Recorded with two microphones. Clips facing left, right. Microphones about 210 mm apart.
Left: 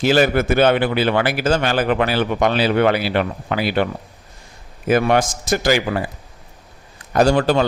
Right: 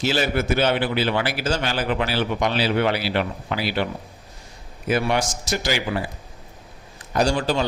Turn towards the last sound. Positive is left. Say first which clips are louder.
# left 6 dB
turn(degrees=60)  # may be behind; listen again after turning